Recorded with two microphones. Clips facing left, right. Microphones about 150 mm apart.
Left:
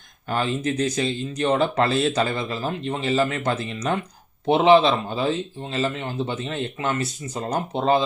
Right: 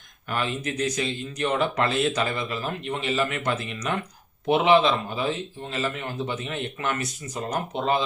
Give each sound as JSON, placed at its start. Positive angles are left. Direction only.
{"t": 0.3, "sound": "speech", "side_deg": 30}